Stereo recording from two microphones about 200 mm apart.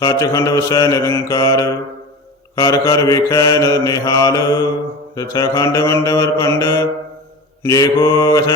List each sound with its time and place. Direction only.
0.0 s mantra: 15° left (ahead or behind)